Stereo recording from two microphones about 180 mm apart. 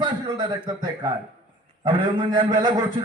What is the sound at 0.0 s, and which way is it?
A man's voice, 25° right (ahead or behind).